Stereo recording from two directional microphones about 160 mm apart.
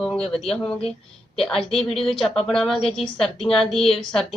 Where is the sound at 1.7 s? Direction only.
Centre (ahead or behind).